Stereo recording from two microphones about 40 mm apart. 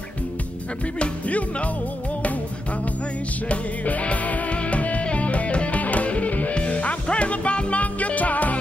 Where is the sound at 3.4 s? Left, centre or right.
Left.